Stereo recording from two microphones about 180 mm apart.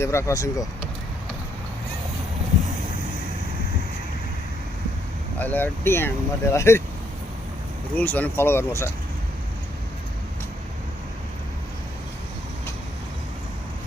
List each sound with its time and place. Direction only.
0.0 s speech: 15° left (ahead or behind)
5.4 s speech: 10° left (ahead or behind)
7.9 s speech: 10° left (ahead or behind)